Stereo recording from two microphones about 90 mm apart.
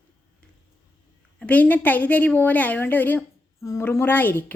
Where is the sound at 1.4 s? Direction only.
15° left (ahead or behind).